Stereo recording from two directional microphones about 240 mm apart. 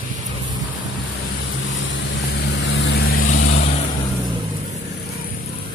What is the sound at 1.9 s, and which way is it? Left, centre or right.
Vehicle, left.